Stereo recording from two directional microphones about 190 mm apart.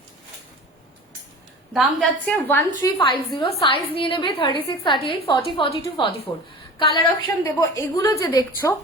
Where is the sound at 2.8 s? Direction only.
25° left (ahead or behind).